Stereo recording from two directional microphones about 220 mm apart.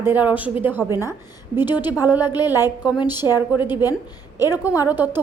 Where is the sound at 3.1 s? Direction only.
20° left (ahead or behind).